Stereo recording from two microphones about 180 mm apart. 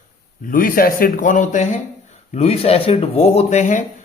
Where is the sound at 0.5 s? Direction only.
50° left (ahead or behind).